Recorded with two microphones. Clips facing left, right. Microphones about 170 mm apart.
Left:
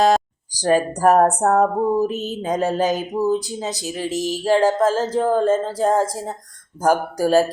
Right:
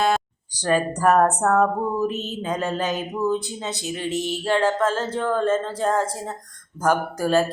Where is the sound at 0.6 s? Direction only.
40° left (ahead or behind).